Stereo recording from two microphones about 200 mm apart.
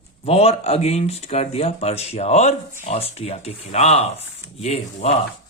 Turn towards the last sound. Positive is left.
turn(degrees=35)  # may be behind; listen again after turning